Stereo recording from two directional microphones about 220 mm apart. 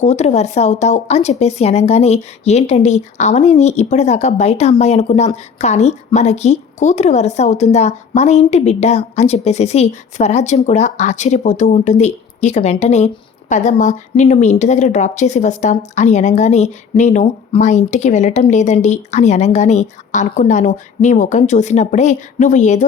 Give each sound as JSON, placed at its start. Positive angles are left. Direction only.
{"t": 0.0, "sound": "speech", "side_deg": 30}